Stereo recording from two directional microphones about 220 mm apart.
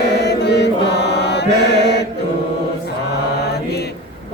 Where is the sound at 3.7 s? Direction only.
50° left (ahead or behind).